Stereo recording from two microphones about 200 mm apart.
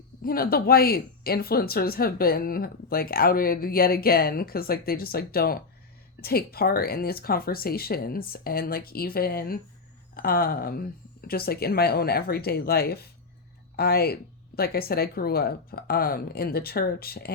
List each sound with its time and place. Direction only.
0.2 s speech: 45° left (ahead or behind)